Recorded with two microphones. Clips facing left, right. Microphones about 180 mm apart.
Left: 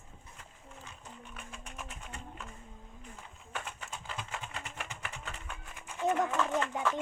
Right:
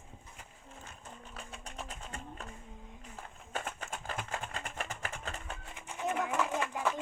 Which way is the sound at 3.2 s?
40° right (ahead or behind).